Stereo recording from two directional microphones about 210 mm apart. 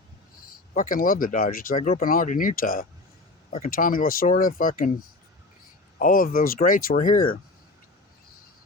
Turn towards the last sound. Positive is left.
turn(degrees=40)  # may be behind; listen again after turning